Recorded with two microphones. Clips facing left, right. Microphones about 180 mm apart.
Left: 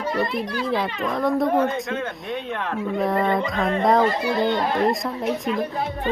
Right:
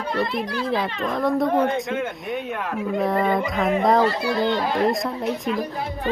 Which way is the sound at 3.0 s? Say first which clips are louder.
Even; centre (ahead or behind).